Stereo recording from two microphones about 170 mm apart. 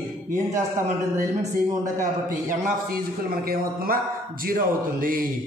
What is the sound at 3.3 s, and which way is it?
Speech, 60° right (ahead or behind).